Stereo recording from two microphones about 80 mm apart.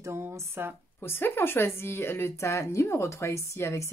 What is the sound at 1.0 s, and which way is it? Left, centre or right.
A woman's voice, left.